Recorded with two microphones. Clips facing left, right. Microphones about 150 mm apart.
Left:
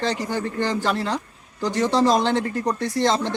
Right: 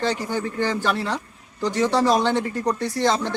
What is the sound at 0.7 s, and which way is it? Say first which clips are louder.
Speech: left 1 dB; 15° left (ahead or behind).